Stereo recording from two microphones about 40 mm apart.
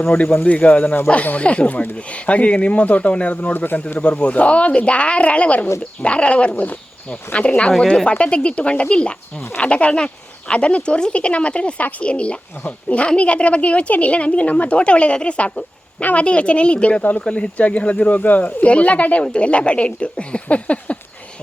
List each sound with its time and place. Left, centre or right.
0.1 s a woman's voice: left
3.5 s a woman's voice: left